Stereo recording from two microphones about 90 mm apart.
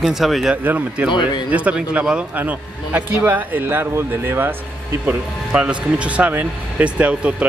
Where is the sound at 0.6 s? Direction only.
20° right (ahead or behind).